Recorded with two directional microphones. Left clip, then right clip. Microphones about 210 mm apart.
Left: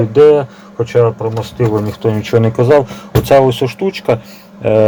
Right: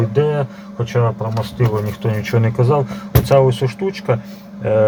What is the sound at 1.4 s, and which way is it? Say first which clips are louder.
Speech: left 4 dB; 40° left (ahead or behind).